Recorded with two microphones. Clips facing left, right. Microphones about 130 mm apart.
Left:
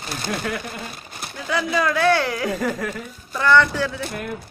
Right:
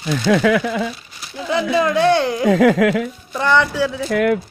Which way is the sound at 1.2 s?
55° left (ahead or behind).